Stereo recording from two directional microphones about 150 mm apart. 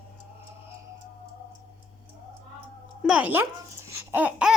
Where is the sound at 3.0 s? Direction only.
10° right (ahead or behind).